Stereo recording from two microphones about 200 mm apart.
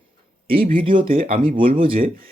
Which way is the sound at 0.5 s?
45° right (ahead or behind).